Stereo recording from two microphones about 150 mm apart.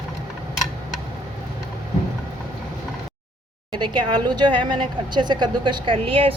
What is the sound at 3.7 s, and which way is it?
A woman's voice, 30° right (ahead or behind).